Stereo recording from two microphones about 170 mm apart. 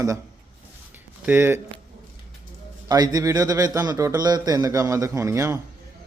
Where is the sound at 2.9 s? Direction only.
20° right (ahead or behind).